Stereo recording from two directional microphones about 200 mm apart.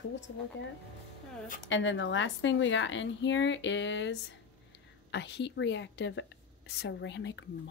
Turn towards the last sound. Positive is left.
turn(degrees=60)  # may be behind; listen again after turning